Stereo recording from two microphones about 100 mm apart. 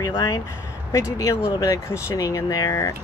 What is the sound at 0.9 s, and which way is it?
Speech, 30° left (ahead or behind).